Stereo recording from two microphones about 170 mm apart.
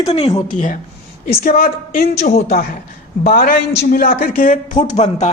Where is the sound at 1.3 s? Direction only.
60° left (ahead or behind).